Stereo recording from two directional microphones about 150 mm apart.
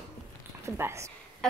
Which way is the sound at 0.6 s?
20° right (ahead or behind).